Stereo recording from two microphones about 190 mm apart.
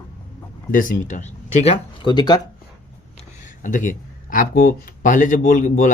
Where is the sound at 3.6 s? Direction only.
45° left (ahead or behind).